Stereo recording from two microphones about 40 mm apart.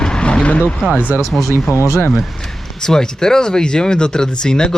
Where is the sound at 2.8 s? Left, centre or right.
Centre.